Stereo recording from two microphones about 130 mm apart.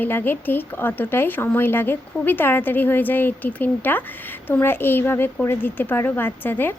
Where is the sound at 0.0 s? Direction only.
15° left (ahead or behind).